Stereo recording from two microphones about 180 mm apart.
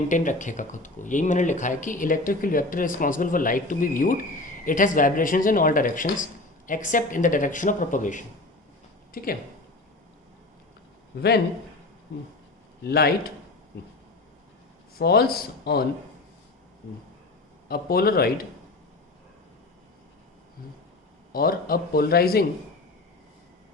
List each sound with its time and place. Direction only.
0.1 s speech: 45° left (ahead or behind)
12.8 s speech: 60° left (ahead or behind)
14.9 s speech: 60° left (ahead or behind)
17.7 s speech: 55° left (ahead or behind)
21.3 s speech: 55° left (ahead or behind)